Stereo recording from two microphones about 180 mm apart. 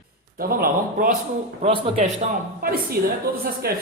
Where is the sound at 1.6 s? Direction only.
35° right (ahead or behind).